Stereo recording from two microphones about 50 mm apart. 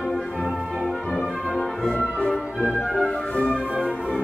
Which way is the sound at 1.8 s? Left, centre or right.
Left.